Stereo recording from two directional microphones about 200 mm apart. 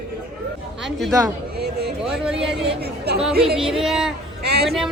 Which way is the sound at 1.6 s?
55° right (ahead or behind).